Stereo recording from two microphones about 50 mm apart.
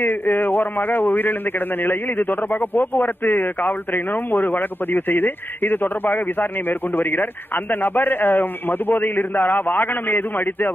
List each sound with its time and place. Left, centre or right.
0.0 s speech: left
2.7 s speech: left